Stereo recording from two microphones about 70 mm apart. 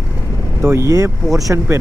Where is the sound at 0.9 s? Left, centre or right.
Right.